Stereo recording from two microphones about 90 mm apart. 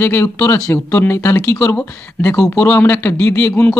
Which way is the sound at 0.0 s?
25° left (ahead or behind).